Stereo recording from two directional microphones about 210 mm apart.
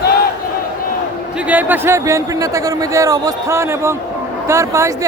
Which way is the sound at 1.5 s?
10° right (ahead or behind).